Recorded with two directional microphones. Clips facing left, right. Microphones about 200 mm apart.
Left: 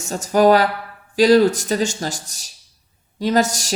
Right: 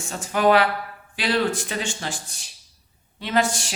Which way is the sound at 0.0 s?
40° left (ahead or behind).